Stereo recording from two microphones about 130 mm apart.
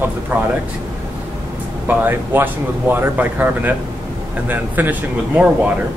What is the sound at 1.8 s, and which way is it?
Speech, 15° right (ahead or behind).